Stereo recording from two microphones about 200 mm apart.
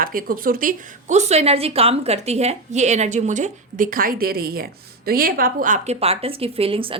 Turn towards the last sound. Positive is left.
turn(degrees=-25)  # may be behind; listen again after turning